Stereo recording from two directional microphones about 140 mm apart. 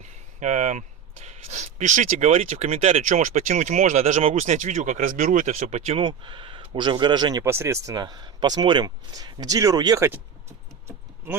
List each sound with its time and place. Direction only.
0.0 s speech: 55° right (ahead or behind)
3.1 s speech: 60° right (ahead or behind); by 10.2 s 20° right (ahead or behind)
11.3 s speech: 15° right (ahead or behind)